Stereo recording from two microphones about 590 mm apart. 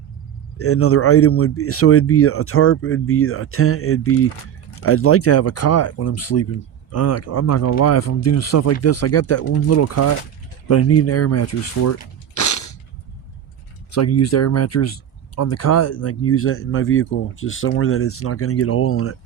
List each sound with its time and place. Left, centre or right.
0.6 s speech: left
12.3 s a sound: left
13.9 s speech: left